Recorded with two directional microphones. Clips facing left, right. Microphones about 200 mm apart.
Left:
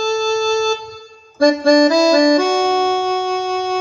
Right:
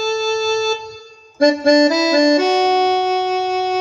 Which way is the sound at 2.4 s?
50° left (ahead or behind).